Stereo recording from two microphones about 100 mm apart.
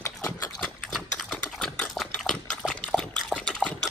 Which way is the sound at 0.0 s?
30° left (ahead or behind).